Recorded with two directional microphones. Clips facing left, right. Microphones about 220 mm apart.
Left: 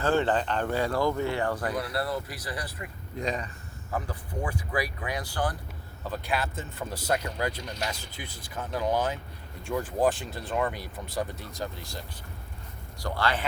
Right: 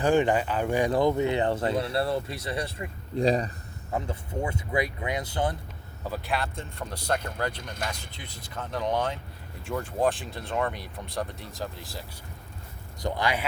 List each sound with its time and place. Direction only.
0.0 s speech: 15° right (ahead or behind); by 3.5 s 35° right (ahead or behind)
3.9 s speech: 25° right (ahead or behind)
6.1 s speech: centre (ahead or behind)
7.6 s speech: 50° right (ahead or behind)
7.9 s speech: 5° left (ahead or behind)
13.0 s a man's voice: 20° right (ahead or behind)